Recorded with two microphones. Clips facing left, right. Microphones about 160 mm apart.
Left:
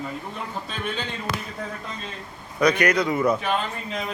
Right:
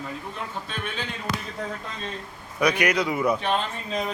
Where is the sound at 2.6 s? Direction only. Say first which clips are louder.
Left 2 dB; 10° right (ahead or behind).